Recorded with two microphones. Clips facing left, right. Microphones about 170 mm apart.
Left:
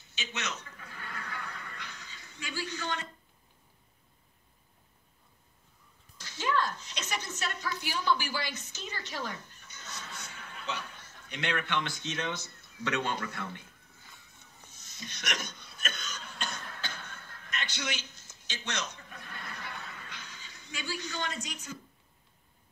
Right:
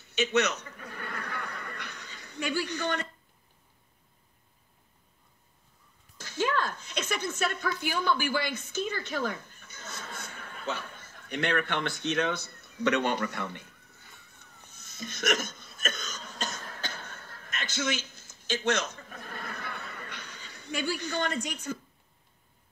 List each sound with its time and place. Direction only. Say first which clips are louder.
0.1 s duck: right 13 dB; 70° right (ahead or behind)
6.1 s a woman's voice: right 2 dB; 50° right (ahead or behind); by 13.7 s 70° right (ahead or behind)
14.4 s hiccup: right 2 dB; 55° right (ahead or behind)